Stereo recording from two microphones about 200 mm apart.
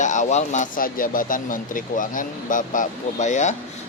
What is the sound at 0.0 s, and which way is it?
Speech, 35° left (ahead or behind).